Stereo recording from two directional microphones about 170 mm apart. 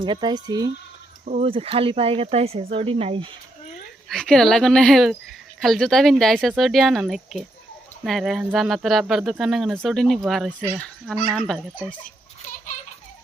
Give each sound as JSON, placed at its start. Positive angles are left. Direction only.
{"t": 0.0, "sound": "speech", "side_deg": -25}
{"t": 1.2, "sound": "speech", "side_deg": -45}
{"t": 1.5, "sound": "speech", "side_deg": -35}
{"t": 4.1, "sound": "speech", "side_deg": 5}